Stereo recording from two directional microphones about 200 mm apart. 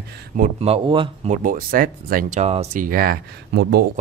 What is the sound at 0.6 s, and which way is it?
Speech, 25° right (ahead or behind).